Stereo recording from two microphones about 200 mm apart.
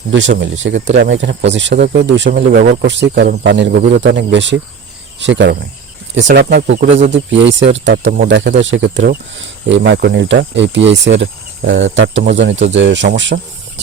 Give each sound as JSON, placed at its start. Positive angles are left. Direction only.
{"t": 0.3, "sound": "speech", "side_deg": -65}
{"t": 7.1, "sound": "speech", "side_deg": -65}
{"t": 8.0, "sound": "speech", "side_deg": -45}
{"t": 8.3, "sound": "speech", "side_deg": -65}